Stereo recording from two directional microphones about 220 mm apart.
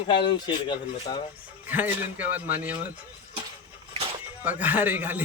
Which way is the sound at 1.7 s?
10° right (ahead or behind).